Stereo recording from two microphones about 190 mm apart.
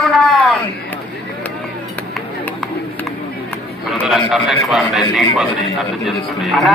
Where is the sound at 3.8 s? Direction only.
Centre (ahead or behind).